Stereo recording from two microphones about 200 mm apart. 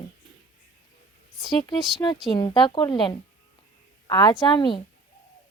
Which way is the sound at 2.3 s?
20° left (ahead or behind).